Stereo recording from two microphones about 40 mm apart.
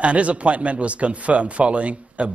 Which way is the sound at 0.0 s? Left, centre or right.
Right.